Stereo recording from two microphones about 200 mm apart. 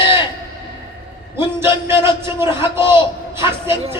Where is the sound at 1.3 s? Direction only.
15° right (ahead or behind).